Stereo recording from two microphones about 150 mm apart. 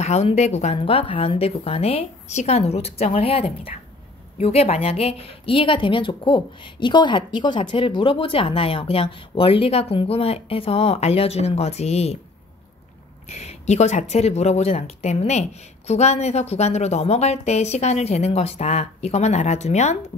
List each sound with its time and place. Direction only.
0.0 s speech: 45° left (ahead or behind)
0.7 s a woman's voice: 35° left (ahead or behind)
13.3 s speech: 50° left (ahead or behind)